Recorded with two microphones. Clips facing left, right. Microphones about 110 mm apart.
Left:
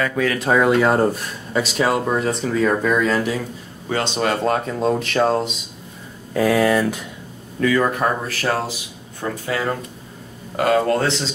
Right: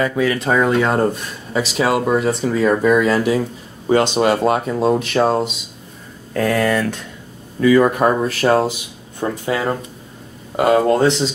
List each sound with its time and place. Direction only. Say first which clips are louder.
0.2 s speech: left 1 dB; centre (ahead or behind)
7.6 s speech: right 5 dB; 15° right (ahead or behind)